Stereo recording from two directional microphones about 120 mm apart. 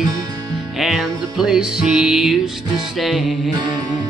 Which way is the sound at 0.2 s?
35° right (ahead or behind).